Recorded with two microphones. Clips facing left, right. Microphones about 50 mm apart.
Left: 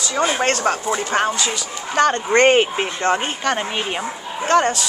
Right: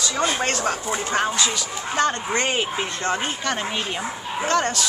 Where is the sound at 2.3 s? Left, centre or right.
Left.